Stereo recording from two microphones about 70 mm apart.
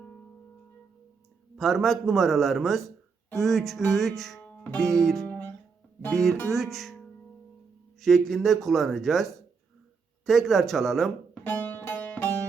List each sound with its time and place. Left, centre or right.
1.5 s speech: centre
4.4 s music: left
4.8 s speech: centre
6.5 s speech: centre
11.4 s music: left